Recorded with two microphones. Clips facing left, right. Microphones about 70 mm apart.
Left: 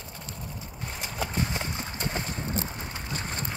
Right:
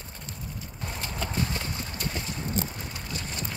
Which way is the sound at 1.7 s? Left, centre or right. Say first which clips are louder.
Left 1 dB; left.